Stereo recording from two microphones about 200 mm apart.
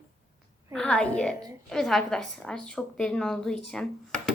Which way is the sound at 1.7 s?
Centre (ahead or behind).